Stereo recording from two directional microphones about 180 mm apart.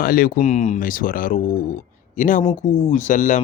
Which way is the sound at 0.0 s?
50° left (ahead or behind).